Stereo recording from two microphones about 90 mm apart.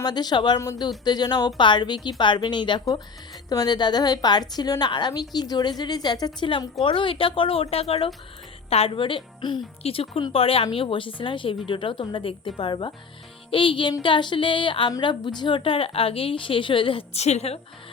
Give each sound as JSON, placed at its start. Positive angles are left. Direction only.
{"t": 0.0, "sound": "a woman's voice", "side_deg": 50}
{"t": 3.5, "sound": "a woman's voice", "side_deg": 50}
{"t": 6.8, "sound": "speech", "side_deg": 70}
{"t": 8.8, "sound": "a woman's voice", "side_deg": 70}
{"t": 9.8, "sound": "speech", "side_deg": 90}
{"t": 10.8, "sound": "a woman's voice", "side_deg": 75}
{"t": 13.5, "sound": "a woman's voice", "side_deg": 75}
{"t": 15.0, "sound": "a woman's voice", "side_deg": 55}